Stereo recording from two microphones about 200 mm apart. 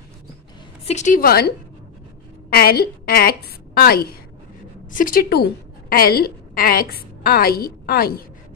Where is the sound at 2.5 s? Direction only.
50° left (ahead or behind).